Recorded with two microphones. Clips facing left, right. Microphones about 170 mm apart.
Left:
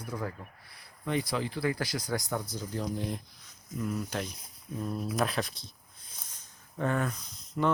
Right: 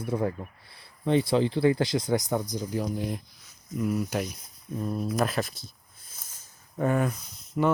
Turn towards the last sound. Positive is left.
turn(degrees=-10)  # may be behind; listen again after turning